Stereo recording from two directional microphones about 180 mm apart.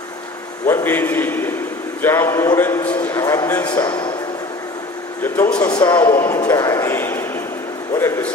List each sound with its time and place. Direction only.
0.7 s speech: 15° left (ahead or behind)
3.7 s a man's voice: 25° left (ahead or behind)
5.2 s speech: 10° left (ahead or behind)